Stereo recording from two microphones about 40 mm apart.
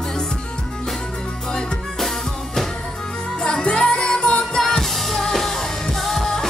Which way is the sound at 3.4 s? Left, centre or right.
Left.